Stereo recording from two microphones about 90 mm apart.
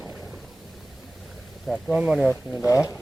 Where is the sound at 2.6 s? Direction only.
35° left (ahead or behind).